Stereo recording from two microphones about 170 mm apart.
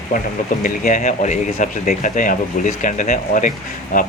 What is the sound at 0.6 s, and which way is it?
Speech, 50° left (ahead or behind).